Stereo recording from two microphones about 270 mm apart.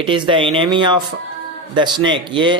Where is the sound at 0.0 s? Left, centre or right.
Centre.